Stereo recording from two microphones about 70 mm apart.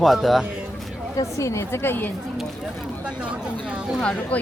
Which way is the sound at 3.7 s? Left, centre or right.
Centre.